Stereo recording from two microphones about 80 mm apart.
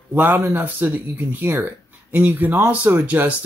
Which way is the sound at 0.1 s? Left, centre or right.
Right.